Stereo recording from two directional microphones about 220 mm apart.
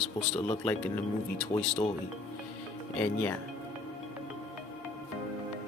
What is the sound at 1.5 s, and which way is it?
Speech, 35° left (ahead or behind).